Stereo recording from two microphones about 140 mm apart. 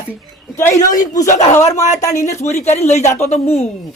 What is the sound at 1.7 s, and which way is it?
Speech, 60° left (ahead or behind).